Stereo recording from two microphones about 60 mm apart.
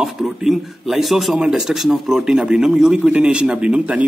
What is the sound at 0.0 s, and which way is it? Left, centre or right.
Speech, centre.